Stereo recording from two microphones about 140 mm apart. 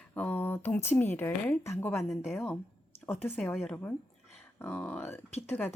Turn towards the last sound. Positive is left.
turn(degrees=15)  # may be behind; listen again after turning